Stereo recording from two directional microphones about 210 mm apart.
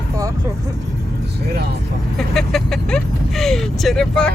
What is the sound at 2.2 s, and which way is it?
Speech, centre (ahead or behind).